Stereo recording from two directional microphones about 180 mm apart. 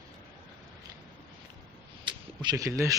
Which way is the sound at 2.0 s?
25° right (ahead or behind).